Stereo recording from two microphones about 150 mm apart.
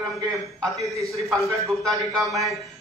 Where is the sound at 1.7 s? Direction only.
Centre (ahead or behind).